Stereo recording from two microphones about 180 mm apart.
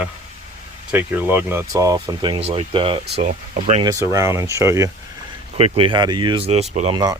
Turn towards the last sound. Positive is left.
turn(degrees=-35)  # may be behind; listen again after turning